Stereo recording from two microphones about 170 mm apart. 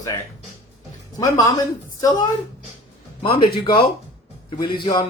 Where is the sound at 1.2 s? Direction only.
20° left (ahead or behind).